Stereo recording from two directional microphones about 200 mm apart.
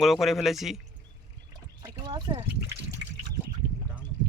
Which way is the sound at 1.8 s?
20° right (ahead or behind).